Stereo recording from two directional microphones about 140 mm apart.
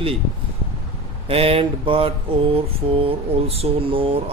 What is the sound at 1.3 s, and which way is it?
Mantra, 45° right (ahead or behind).